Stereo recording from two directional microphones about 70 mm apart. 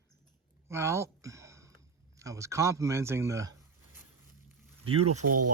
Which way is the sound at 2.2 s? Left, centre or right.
Right.